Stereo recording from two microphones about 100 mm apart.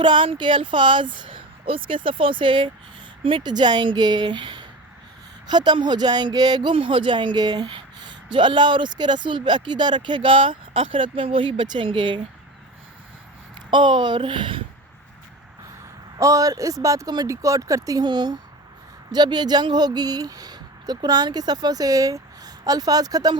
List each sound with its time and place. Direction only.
0.0 s speech: 50° right (ahead or behind)
13.7 s speech: 50° right (ahead or behind)
16.1 s speech: 35° right (ahead or behind)